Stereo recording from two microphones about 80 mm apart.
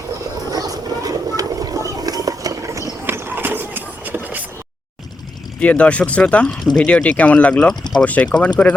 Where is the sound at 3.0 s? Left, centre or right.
Right.